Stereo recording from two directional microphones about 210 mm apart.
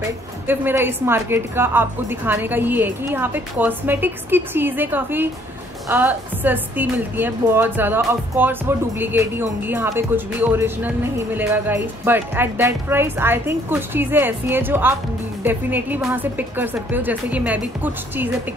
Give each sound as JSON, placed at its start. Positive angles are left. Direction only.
{"t": 0.5, "sound": "a woman's voice", "side_deg": -10}